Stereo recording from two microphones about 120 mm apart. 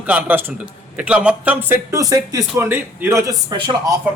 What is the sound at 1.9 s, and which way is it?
A man's voice, 30° right (ahead or behind).